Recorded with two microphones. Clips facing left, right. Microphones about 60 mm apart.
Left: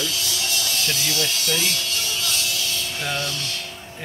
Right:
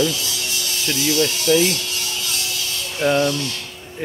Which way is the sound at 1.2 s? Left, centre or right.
Centre.